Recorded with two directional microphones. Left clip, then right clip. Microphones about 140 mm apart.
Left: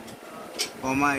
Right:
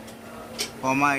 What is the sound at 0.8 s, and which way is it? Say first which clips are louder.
Speech: right 3 dB; 45° right (ahead or behind).